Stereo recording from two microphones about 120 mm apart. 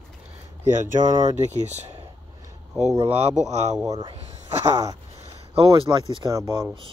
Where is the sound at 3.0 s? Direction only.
60° right (ahead or behind).